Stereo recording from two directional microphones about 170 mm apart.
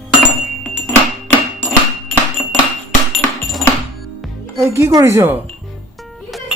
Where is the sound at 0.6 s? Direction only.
5° left (ahead or behind).